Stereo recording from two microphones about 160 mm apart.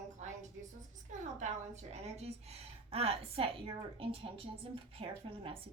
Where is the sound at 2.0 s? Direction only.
40° right (ahead or behind).